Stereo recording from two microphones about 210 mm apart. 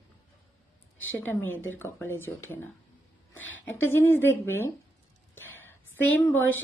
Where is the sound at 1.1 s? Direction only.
10° left (ahead or behind).